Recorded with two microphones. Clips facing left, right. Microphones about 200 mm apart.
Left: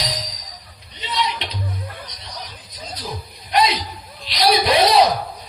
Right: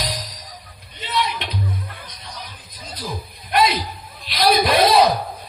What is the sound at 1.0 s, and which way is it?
Music, 50° right (ahead or behind).